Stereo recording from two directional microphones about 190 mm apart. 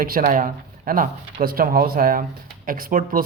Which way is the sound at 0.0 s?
50° right (ahead or behind).